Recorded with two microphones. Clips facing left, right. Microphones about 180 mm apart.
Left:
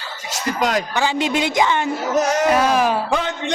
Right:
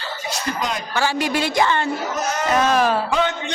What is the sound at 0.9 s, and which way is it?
Speech, 20° left (ahead or behind).